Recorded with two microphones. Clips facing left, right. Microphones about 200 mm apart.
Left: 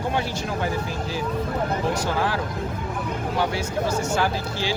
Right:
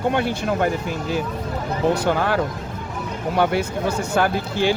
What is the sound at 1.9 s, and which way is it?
Speech, 60° right (ahead or behind).